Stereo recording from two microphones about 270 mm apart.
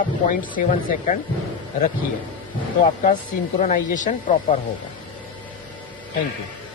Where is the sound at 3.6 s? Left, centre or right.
Left.